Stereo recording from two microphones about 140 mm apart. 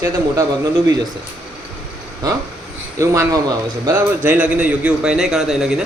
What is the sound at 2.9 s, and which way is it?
A man's voice, 20° right (ahead or behind).